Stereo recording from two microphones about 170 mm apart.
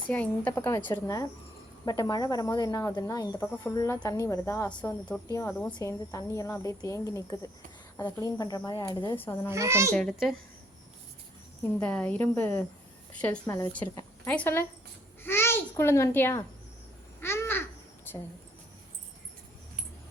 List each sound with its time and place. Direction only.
0.1 s speech: 10° left (ahead or behind)
9.5 s a child's voice: 15° right (ahead or behind)
9.9 s a child's voice: 5° left (ahead or behind)
11.8 s a child's voice: 10° left (ahead or behind)
17.2 s babbling: 15° left (ahead or behind)